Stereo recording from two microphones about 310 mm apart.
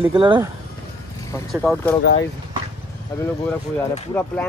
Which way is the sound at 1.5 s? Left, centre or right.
Centre.